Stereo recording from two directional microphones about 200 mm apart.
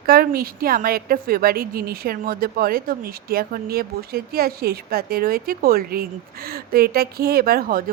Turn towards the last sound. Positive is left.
turn(degrees=-45)  # may be behind; listen again after turning